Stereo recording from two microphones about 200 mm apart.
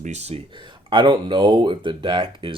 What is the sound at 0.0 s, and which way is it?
Speech, 35° right (ahead or behind).